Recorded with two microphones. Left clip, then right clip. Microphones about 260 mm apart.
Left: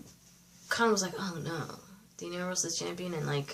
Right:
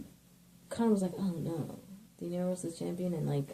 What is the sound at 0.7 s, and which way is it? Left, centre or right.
Speech, left.